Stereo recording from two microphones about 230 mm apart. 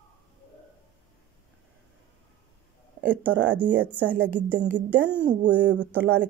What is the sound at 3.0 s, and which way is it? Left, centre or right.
A woman's voice, centre.